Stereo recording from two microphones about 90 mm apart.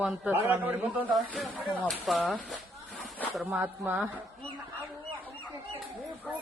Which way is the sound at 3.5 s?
25° right (ahead or behind).